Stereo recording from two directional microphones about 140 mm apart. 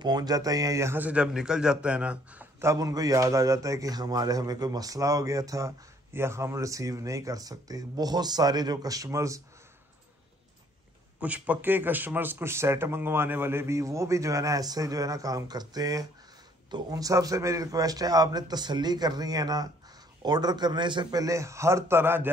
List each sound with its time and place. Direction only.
0.0 s a man's voice: 30° right (ahead or behind); by 2.4 s 10° right (ahead or behind)
2.6 s a man's voice: 25° right (ahead or behind)
11.1 s a man's voice: 10° right (ahead or behind)